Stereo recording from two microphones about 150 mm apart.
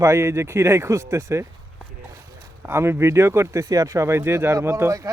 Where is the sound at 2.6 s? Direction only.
15° right (ahead or behind).